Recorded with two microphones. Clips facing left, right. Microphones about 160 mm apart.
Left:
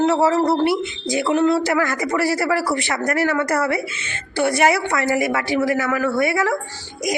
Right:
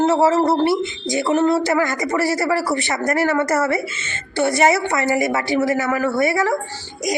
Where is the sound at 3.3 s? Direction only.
5° right (ahead or behind).